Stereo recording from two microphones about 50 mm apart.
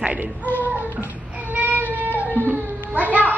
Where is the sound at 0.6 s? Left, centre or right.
Right.